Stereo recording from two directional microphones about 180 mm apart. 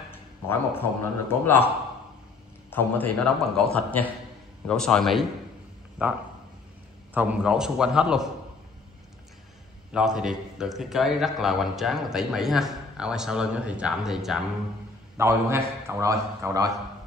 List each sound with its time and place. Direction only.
0.1 s a sound: 10° left (ahead or behind)
1.4 s a man's voice: 10° left (ahead or behind)
2.7 s a man's voice: 5° left (ahead or behind)
7.2 s a man's voice: 5° right (ahead or behind)
9.9 s a man's voice: 5° right (ahead or behind)
15.1 s a man's voice: 15° right (ahead or behind)